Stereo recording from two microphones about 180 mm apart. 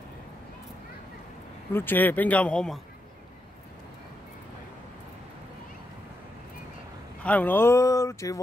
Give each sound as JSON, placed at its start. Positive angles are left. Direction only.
{"t": 1.7, "sound": "speech", "side_deg": 10}
{"t": 7.2, "sound": "speech", "side_deg": 10}